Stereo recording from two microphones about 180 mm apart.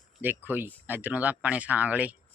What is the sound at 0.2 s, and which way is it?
Speech, 10° right (ahead or behind).